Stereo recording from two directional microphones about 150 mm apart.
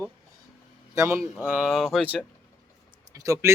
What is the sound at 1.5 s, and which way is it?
Speech, 5° right (ahead or behind).